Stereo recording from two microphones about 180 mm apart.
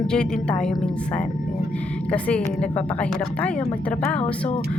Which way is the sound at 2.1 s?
10° left (ahead or behind).